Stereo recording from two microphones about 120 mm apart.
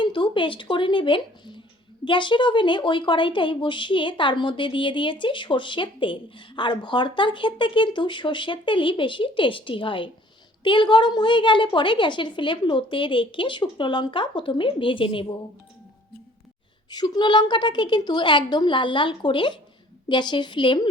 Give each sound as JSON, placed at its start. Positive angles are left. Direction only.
{"t": 0.0, "sound": "a woman's voice", "side_deg": 45}
{"t": 16.9, "sound": "a woman's voice", "side_deg": 35}